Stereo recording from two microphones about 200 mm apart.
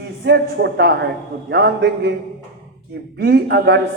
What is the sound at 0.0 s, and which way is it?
Speech, 55° right (ahead or behind).